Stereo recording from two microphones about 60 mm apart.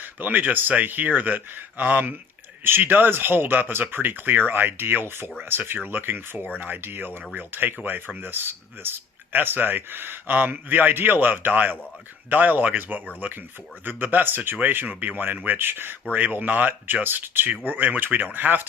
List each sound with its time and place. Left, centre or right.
0.0 s speech: right